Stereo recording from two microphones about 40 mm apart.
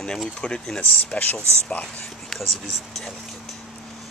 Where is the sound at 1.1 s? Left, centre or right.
Left.